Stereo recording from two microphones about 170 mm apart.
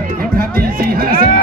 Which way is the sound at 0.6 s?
60° right (ahead or behind).